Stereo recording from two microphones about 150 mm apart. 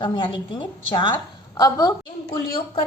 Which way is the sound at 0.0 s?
30° left (ahead or behind).